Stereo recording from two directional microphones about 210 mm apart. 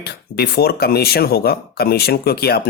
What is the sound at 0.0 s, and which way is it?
Speech, 50° left (ahead or behind).